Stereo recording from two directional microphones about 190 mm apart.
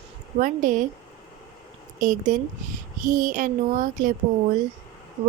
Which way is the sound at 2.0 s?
45° right (ahead or behind).